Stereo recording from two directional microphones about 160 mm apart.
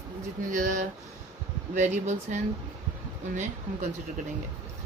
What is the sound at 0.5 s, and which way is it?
Speech, 55° right (ahead or behind).